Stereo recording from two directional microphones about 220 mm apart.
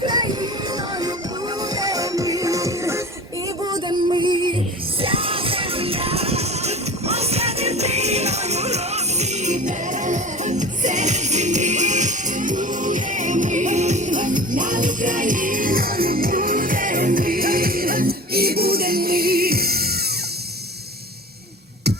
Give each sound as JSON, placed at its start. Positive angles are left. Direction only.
{"t": 0.0, "sound": "music", "side_deg": -20}
{"t": 1.7, "sound": "music", "side_deg": -15}